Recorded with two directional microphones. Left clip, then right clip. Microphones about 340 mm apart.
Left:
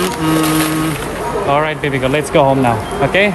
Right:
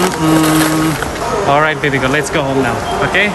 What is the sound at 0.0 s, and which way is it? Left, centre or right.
Insect, right.